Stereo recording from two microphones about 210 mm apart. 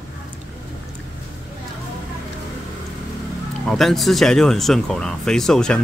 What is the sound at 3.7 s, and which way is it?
Speech, centre (ahead or behind).